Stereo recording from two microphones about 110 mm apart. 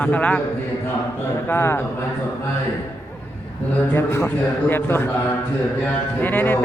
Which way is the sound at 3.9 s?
25° left (ahead or behind).